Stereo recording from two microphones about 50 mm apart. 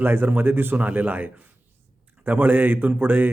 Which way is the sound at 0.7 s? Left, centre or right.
Right.